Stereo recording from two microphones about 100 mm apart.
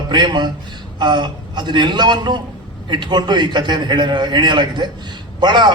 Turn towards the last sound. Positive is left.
turn(degrees=-50)  # may be behind; listen again after turning